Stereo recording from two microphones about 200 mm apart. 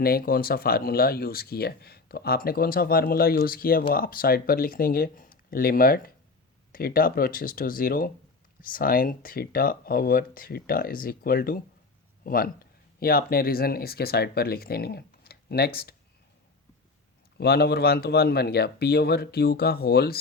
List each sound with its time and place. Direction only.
0.0 s speech: 50° left (ahead or behind)
17.3 s speech: 50° left (ahead or behind)